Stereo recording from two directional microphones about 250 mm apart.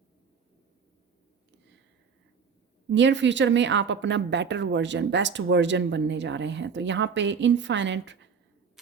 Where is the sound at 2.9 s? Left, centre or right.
Right.